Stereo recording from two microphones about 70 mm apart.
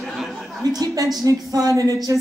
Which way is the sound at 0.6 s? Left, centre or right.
Right.